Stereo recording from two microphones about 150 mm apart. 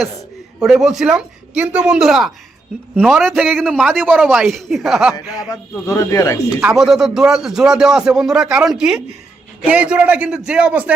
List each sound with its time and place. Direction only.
0.6 s a man's voice: 5° right (ahead or behind)
5.5 s speech: 20° left (ahead or behind)
6.6 s a man's voice: 5° right (ahead or behind)